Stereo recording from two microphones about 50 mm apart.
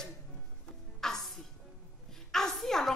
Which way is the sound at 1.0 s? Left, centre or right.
Centre.